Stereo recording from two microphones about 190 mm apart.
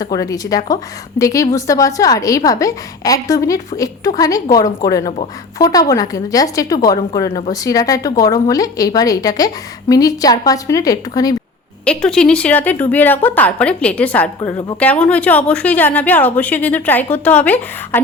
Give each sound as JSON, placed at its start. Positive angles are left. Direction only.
{"t": 0.0, "sound": "a woman's voice", "side_deg": 20}
{"t": 11.9, "sound": "a woman's voice", "side_deg": 5}